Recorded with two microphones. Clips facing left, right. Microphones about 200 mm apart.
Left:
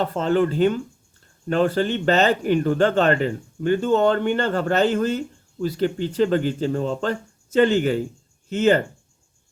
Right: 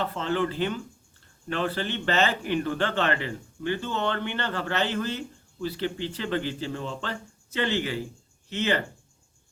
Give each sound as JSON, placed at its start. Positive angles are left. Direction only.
{"t": 0.0, "sound": "speech", "side_deg": 40}